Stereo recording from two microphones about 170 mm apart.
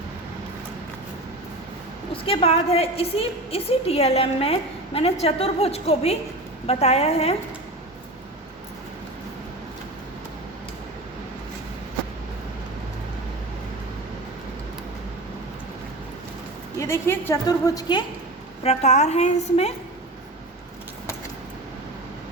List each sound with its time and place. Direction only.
2.2 s a woman's voice: 35° left (ahead or behind)
16.8 s a sound: 15° left (ahead or behind)
17.7 s a woman's voice: 25° left (ahead or behind)
18.6 s a woman's voice: 40° left (ahead or behind)